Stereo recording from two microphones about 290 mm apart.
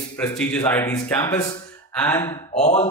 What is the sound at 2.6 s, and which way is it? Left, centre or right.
Speech, left.